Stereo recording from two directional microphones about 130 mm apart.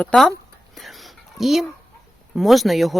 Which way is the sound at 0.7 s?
Centre (ahead or behind).